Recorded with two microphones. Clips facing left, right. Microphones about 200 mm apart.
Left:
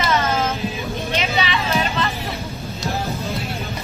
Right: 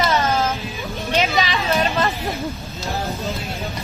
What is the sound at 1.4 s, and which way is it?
Vehicle, 40° right (ahead or behind).